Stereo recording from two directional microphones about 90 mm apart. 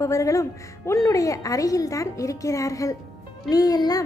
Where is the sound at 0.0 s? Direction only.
35° left (ahead or behind).